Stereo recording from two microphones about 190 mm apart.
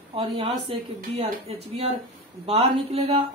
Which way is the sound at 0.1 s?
30° right (ahead or behind).